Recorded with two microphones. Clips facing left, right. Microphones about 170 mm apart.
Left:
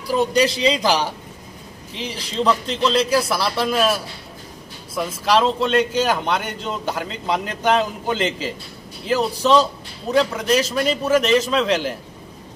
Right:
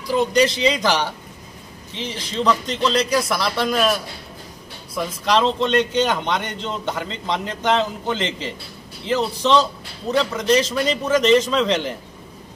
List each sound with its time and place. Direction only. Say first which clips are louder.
0.4 s a man's voice: right 1 dB; 35° left (ahead or behind)
2.0 s a man's voice: left 1 dB; 35° left (ahead or behind)
2.7 s a man's voice: left 1 dB; centre (ahead or behind)